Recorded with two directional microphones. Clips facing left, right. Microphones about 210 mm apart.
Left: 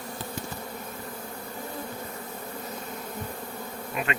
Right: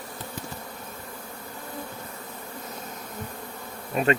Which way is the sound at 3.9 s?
35° right (ahead or behind).